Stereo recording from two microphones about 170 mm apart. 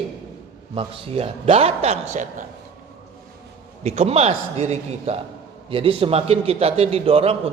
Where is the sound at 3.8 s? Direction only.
40° right (ahead or behind).